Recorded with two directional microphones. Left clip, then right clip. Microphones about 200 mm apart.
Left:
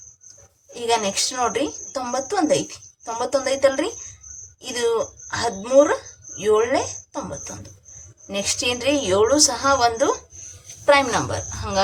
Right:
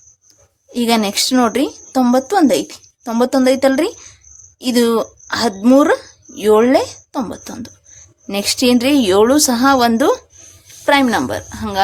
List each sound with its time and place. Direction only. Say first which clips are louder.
0.7 s speech: right 5 dB; 50° right (ahead or behind)